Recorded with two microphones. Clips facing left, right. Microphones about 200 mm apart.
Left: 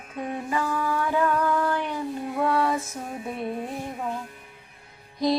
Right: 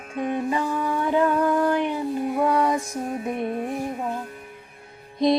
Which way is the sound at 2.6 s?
15° right (ahead or behind).